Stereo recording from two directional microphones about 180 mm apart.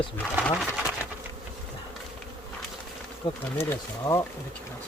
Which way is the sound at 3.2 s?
25° left (ahead or behind).